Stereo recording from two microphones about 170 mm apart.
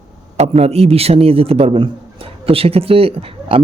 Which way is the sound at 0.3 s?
40° right (ahead or behind).